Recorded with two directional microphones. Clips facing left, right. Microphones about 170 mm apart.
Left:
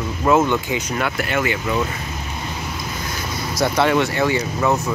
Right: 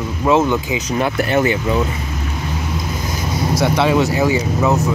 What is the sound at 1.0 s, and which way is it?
Speech, 30° right (ahead or behind).